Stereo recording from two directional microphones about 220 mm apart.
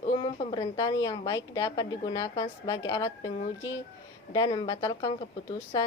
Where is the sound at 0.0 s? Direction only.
25° left (ahead or behind).